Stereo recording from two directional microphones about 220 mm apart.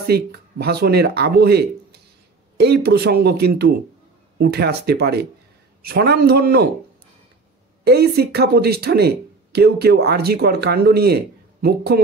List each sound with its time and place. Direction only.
0.0 s speech: 45° right (ahead or behind)
7.8 s speech: 45° right (ahead or behind)